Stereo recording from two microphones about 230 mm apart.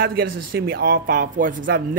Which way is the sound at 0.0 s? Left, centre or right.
Right.